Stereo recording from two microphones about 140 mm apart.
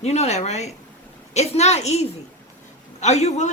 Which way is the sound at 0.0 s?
50° left (ahead or behind).